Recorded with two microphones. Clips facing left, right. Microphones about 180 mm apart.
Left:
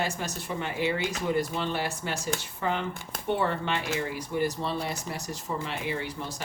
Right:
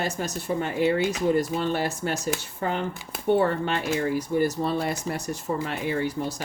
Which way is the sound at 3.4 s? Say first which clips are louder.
Right 5 dB; 45° right (ahead or behind).